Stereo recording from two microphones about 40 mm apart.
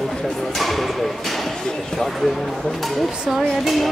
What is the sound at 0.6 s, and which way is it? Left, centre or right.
Music, centre.